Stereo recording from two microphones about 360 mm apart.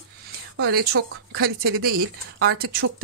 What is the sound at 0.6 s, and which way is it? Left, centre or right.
Speech, right.